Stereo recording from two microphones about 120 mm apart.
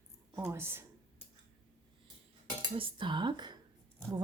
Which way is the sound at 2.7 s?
45° right (ahead or behind).